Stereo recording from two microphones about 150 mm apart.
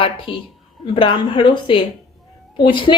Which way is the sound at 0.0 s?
35° left (ahead or behind).